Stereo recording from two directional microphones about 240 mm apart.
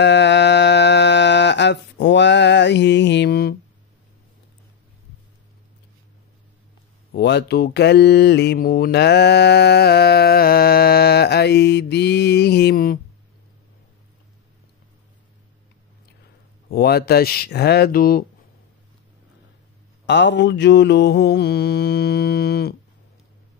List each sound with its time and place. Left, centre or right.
0.0 s mantra: left
7.1 s mantra: left
16.7 s speech: left
20.1 s mantra: left